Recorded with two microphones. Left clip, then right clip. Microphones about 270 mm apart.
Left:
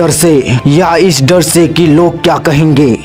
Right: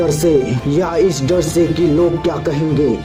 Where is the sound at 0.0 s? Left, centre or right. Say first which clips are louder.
Left 5 dB; left.